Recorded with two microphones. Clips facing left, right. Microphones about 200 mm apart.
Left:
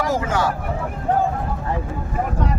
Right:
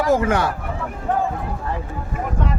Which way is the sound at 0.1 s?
60° right (ahead or behind).